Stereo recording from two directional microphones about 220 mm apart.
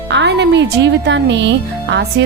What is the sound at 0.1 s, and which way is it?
Speech, 55° right (ahead or behind).